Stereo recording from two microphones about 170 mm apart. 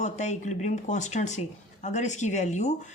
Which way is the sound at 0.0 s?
45° left (ahead or behind).